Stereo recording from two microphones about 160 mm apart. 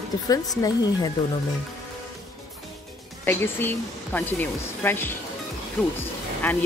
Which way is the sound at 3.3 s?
15° left (ahead or behind).